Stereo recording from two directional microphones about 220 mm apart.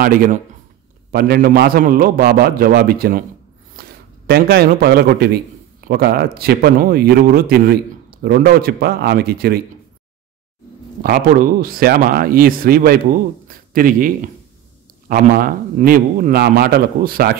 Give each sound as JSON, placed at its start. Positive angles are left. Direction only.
{"t": 0.0, "sound": "speech", "side_deg": -40}
{"t": 3.8, "sound": "a sound", "side_deg": -45}
{"t": 4.3, "sound": "speech", "side_deg": -45}
{"t": 11.0, "sound": "speech", "side_deg": -40}
{"t": 13.5, "sound": "a sound", "side_deg": -40}
{"t": 15.0, "sound": "speech", "side_deg": -40}